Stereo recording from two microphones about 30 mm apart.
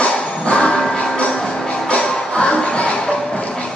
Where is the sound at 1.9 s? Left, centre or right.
Left.